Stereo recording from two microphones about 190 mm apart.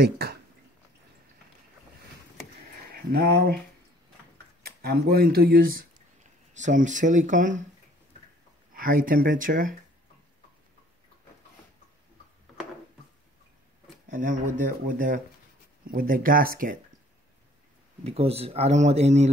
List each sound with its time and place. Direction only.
0.0 s speech: 55° right (ahead or behind)
2.9 s speech: 55° right (ahead or behind)
4.6 s speech: 55° right (ahead or behind)
8.7 s speech: 45° right (ahead or behind)
14.0 s speech: 40° right (ahead or behind)
18.0 s speech: 30° right (ahead or behind)